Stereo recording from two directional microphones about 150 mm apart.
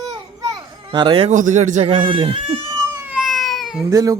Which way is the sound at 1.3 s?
55° right (ahead or behind).